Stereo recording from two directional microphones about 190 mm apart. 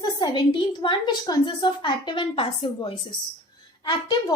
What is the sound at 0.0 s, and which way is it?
A woman's voice, 20° left (ahead or behind).